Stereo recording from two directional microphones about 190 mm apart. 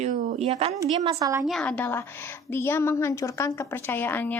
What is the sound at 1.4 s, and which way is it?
A woman's voice, 5° left (ahead or behind).